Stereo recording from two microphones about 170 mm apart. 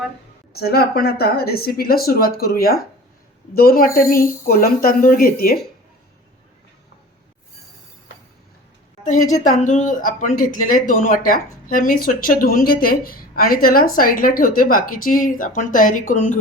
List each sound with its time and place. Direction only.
0.5 s a woman's voice: 65° left (ahead or behind)
9.0 s speech: 50° left (ahead or behind)